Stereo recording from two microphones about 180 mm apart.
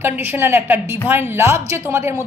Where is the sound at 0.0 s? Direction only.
10° right (ahead or behind).